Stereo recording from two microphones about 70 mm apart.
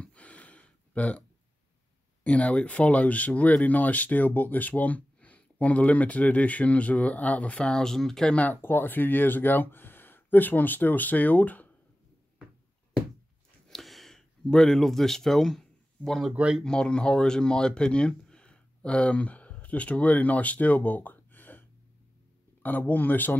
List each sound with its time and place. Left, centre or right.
0.0 s gasp: centre
2.2 s speech: centre
8.4 s speech: left
13.7 s a sound: centre
16.3 s speech: centre
16.6 s speech: centre